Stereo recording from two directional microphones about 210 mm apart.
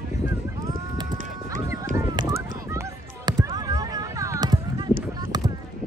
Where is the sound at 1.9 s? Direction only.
20° right (ahead or behind).